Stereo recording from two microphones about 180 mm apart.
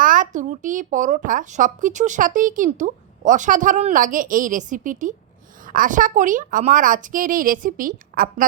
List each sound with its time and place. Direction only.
0.0 s speech: 50° right (ahead or behind)